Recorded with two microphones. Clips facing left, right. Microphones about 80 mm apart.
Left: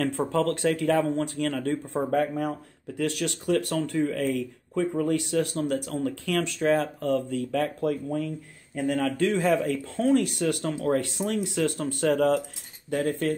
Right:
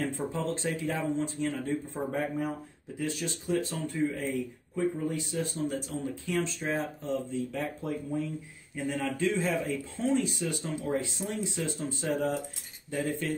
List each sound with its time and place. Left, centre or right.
0.0 s speech: left
12.9 s speech: left